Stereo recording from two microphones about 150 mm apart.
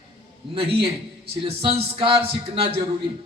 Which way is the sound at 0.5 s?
35° right (ahead or behind).